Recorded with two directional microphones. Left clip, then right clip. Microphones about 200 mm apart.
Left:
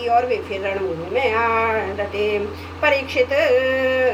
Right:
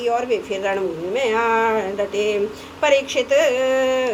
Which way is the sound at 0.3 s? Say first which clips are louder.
Right 1 dB; 55° right (ahead or behind).